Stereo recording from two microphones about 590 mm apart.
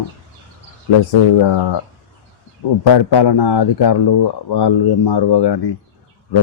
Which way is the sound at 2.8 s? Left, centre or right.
Left.